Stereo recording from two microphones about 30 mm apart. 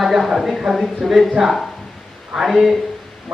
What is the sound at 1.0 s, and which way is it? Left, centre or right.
Speech, centre.